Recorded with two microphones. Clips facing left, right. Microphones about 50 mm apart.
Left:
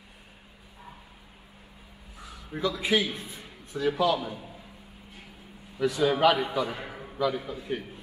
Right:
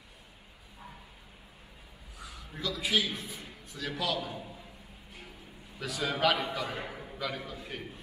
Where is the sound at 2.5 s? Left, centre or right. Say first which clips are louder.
Left 5 dB; left.